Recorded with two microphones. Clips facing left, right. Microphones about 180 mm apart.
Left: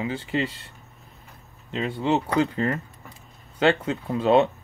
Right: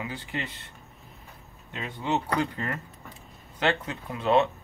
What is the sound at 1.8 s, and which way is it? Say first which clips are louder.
Speech: left 6 dB; 25° left (ahead or behind).